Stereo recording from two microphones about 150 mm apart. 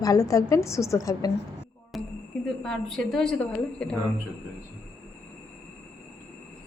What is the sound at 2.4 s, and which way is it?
A woman's voice, 5° left (ahead or behind).